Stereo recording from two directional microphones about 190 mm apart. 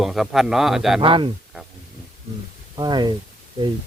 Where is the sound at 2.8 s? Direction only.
25° right (ahead or behind).